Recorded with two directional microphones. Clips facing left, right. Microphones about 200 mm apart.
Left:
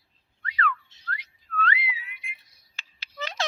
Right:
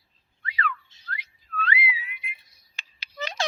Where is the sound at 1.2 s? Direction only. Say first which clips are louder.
Left 3 dB; 10° right (ahead or behind).